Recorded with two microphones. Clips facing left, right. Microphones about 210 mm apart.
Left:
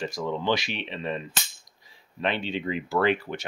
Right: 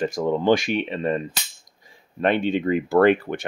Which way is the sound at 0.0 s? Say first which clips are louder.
Right 7 dB; 50° right (ahead or behind).